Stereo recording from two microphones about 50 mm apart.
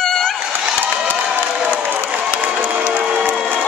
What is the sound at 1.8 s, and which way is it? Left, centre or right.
Crowd, right.